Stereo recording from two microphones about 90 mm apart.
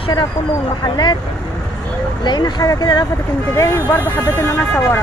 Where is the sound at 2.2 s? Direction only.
50° left (ahead or behind).